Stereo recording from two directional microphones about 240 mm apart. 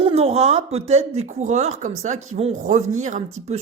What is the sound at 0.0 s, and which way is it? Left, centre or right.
Speech, right.